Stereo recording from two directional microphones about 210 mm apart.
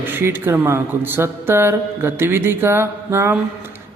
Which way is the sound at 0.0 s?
10° right (ahead or behind).